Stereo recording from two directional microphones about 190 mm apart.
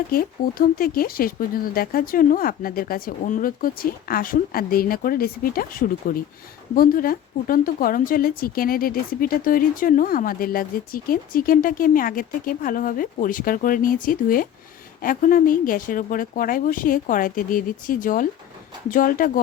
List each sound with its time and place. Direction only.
0.1 s speech: 50° left (ahead or behind)